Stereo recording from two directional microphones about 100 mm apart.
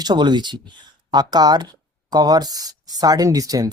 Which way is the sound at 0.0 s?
50° right (ahead or behind).